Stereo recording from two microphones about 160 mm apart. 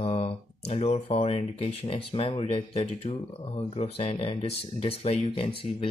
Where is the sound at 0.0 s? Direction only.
35° left (ahead or behind).